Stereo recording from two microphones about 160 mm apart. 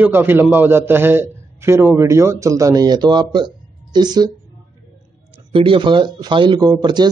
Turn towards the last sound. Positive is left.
turn(degrees=-25)  # may be behind; listen again after turning